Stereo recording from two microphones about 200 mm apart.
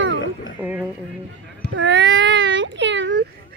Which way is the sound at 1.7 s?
70° right (ahead or behind).